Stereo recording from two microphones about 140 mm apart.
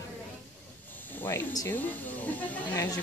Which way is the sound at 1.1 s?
15° left (ahead or behind).